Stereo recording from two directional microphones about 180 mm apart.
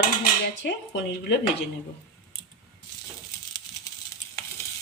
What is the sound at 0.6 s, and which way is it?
Speech, 65° left (ahead or behind).